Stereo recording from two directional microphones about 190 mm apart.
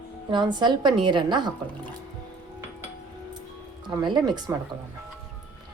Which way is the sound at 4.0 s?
20° right (ahead or behind).